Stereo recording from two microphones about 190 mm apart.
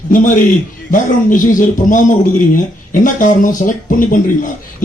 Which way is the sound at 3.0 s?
40° left (ahead or behind).